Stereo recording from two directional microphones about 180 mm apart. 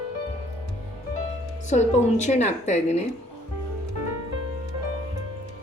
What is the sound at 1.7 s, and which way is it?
A woman's voice, 40° left (ahead or behind).